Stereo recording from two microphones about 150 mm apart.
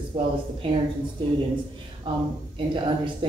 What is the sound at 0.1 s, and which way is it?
Speech, 40° right (ahead or behind).